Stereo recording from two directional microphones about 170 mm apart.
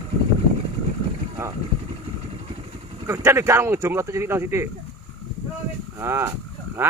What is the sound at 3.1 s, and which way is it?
Speech, 15° right (ahead or behind).